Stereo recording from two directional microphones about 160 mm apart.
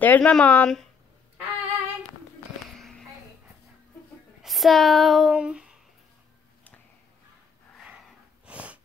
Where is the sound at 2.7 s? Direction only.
5° left (ahead or behind).